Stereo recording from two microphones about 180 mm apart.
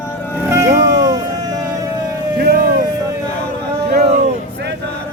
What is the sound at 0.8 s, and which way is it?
Music, 20° right (ahead or behind).